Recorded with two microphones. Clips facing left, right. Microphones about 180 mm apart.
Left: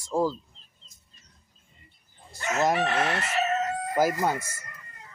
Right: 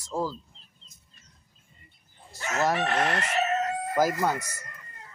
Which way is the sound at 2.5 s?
15° left (ahead or behind).